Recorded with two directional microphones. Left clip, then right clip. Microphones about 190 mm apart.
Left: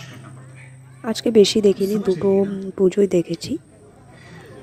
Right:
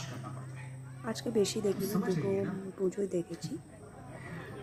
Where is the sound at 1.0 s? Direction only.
35° left (ahead or behind).